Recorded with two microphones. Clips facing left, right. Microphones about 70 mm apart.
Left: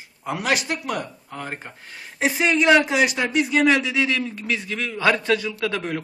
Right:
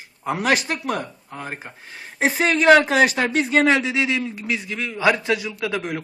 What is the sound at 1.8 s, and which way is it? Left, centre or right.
Speech, right.